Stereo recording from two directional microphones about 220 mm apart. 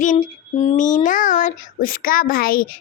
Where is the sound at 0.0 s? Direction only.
35° left (ahead or behind).